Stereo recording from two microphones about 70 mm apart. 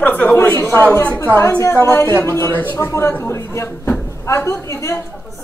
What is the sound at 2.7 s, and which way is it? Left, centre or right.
A man's voice, left.